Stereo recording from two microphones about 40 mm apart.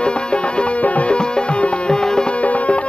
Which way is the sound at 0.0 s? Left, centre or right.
Left.